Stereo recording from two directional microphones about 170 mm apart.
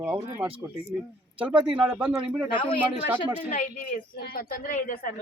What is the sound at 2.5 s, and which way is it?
Speech, 30° left (ahead or behind).